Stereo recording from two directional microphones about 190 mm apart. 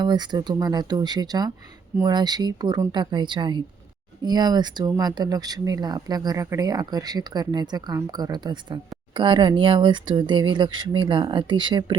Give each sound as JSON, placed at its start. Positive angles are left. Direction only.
{"t": 0.0, "sound": "speech", "side_deg": -20}